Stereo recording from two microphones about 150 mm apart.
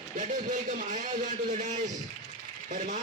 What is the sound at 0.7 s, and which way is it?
A man's voice, 60° right (ahead or behind).